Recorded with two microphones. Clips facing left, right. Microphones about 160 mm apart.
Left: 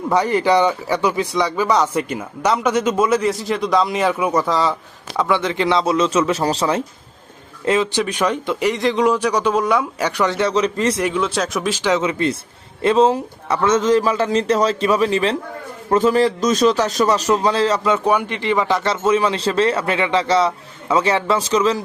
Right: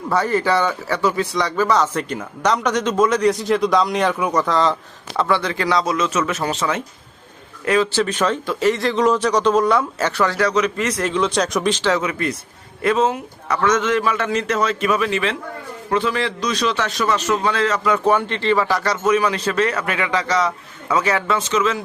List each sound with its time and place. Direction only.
0.1 s speech: 15° left (ahead or behind); by 6.8 s 35° left (ahead or behind)
7.6 s speech: 20° left (ahead or behind)
11.0 s speech: 5° left (ahead or behind)
11.8 s a man's voice: 20° left (ahead or behind)
17.9 s speech: 15° left (ahead or behind); by 21.8 s 35° left (ahead or behind)